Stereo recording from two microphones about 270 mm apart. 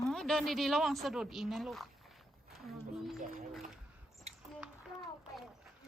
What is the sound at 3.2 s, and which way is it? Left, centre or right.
Speech, right.